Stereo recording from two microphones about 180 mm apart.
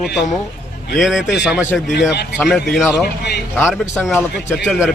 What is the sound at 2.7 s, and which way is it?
Speech, 5° left (ahead or behind).